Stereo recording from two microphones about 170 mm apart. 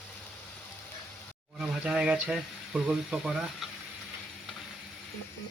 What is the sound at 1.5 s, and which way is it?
Speech, 5° right (ahead or behind).